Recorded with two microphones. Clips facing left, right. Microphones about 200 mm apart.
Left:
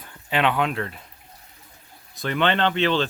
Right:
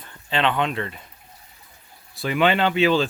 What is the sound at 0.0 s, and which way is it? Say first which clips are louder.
Speech: even; 10° left (ahead or behind).